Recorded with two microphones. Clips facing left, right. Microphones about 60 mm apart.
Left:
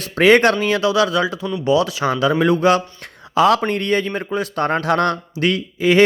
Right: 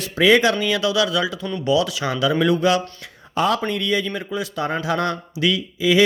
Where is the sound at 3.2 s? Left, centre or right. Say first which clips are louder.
Left 6 dB; left.